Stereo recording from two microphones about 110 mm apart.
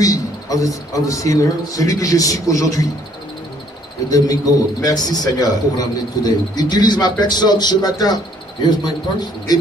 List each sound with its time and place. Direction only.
0.0 s a man's voice: 30° left (ahead or behind)
4.1 s a man's voice: 35° left (ahead or behind)